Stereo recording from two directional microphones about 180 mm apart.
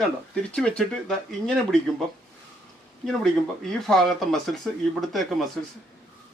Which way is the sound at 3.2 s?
Centre (ahead or behind).